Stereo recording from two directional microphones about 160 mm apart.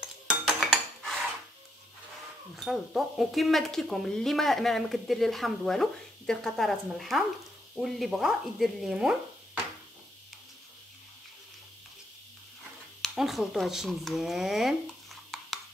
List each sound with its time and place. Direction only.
0.0 s cutlery: 5° right (ahead or behind)
2.5 s speech: centre (ahead or behind)
13.0 s a sound: centre (ahead or behind)